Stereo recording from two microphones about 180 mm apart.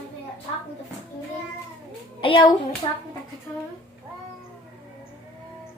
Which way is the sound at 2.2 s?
25° left (ahead or behind).